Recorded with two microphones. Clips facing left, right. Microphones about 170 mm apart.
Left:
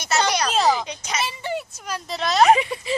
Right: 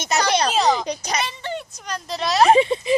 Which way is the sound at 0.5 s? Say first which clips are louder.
Right 1 dB; centre (ahead or behind).